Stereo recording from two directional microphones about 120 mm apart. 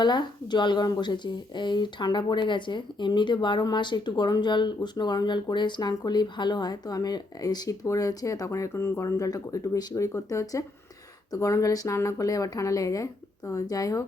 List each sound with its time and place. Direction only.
0.0 s a woman's voice: 40° left (ahead or behind)